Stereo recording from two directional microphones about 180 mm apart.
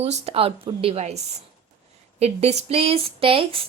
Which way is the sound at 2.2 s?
35° right (ahead or behind).